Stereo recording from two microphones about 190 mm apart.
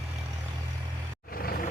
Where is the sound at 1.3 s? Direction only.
50° left (ahead or behind).